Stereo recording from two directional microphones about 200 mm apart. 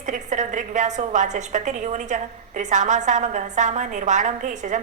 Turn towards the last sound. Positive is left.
turn(degrees=-40)  # may be behind; listen again after turning